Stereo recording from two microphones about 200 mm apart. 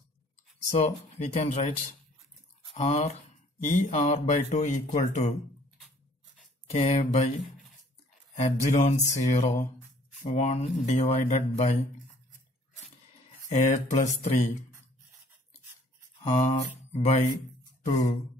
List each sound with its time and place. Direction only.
0.7 s speech: 35° left (ahead or behind)
2.7 s speech: 30° left (ahead or behind)
6.7 s speech: 35° left (ahead or behind)
8.4 s speech: 35° left (ahead or behind)
13.5 s speech: 35° left (ahead or behind)
16.3 s mantra: 30° left (ahead or behind)